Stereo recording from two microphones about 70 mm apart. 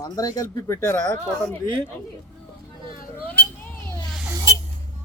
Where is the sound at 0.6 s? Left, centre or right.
Left.